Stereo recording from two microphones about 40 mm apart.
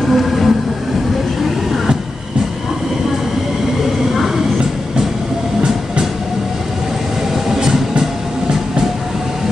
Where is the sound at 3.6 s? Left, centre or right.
Centre.